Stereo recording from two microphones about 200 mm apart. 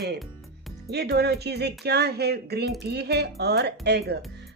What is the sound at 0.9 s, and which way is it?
Speech, 55° right (ahead or behind).